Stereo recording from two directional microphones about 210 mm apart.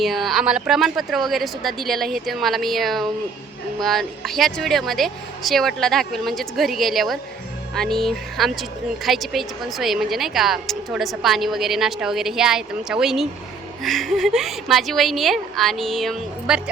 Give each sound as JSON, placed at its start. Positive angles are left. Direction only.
{"t": 0.0, "sound": "a woman's voice", "side_deg": 0}